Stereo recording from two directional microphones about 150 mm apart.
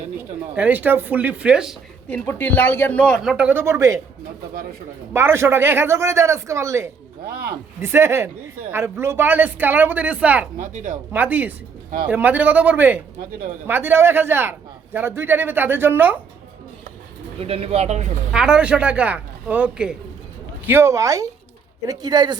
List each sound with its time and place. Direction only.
0.5 s speech: 10° right (ahead or behind)
2.0 s speech: 10° left (ahead or behind)
3.2 s speech: 10° right (ahead or behind)
5.1 s speech: 15° right (ahead or behind)
10.6 s speech: 55° right (ahead or behind)
11.1 s speech: 10° right (ahead or behind)
17.4 s speech: 40° right (ahead or behind)
18.3 s speech: 5° right (ahead or behind)
20.7 s speech: 15° right (ahead or behind)